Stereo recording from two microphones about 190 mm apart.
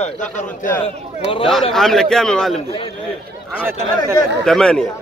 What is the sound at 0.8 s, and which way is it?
Speech, 30° left (ahead or behind).